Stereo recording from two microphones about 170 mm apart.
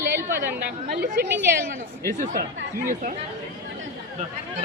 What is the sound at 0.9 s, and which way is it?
A woman's voice, 60° right (ahead or behind).